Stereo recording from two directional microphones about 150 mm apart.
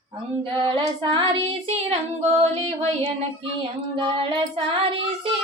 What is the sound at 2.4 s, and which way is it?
Music, 45° right (ahead or behind).